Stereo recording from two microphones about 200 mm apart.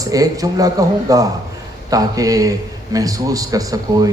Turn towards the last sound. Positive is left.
turn(degrees=-15)  # may be behind; listen again after turning